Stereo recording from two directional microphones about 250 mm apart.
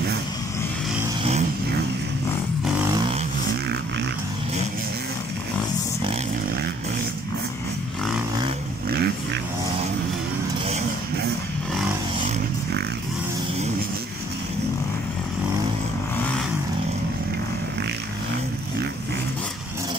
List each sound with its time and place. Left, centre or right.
8.9 s vehicle: right